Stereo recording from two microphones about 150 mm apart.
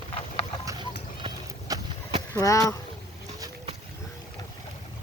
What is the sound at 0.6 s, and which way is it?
Clip-clop, 20° right (ahead or behind).